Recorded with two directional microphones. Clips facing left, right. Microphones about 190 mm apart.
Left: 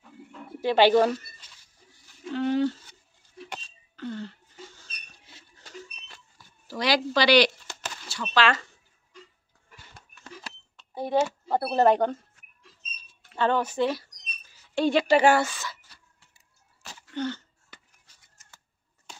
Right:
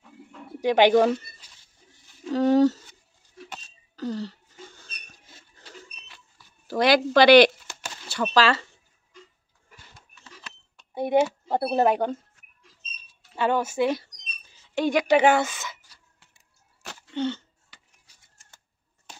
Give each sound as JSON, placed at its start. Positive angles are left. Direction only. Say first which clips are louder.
{"t": 0.6, "sound": "speech", "louder": "right 1 dB", "side_deg": -15}
{"t": 2.3, "sound": "speech", "louder": "right 6 dB", "side_deg": -40}
{"t": 3.6, "sound": "throat clearing", "louder": "right 7 dB", "side_deg": -40}
{"t": 4.7, "sound": "rodents", "louder": "right 2 dB", "side_deg": -50}
{"t": 5.6, "sound": "a sound", "louder": "left 3 dB", "side_deg": 45}
{"t": 6.7, "sound": "speech", "louder": "right 6 dB", "side_deg": -55}
{"t": 10.8, "sound": "cash register", "louder": "right 3 dB", "side_deg": -15}
{"t": 11.5, "sound": "speech", "louder": "left 1 dB", "side_deg": -15}
{"t": 13.3, "sound": "speech", "louder": "right 1 dB", "side_deg": -10}
{"t": 17.1, "sound": "throat clearing", "louder": "right 3 dB", "side_deg": -20}
{"t": 17.7, "sound": "a sound", "louder": "left 6 dB", "side_deg": 50}